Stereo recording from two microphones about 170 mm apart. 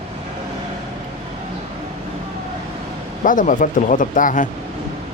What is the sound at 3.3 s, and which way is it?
Speech, 50° left (ahead or behind).